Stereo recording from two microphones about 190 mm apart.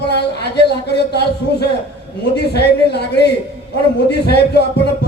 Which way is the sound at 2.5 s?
60° left (ahead or behind).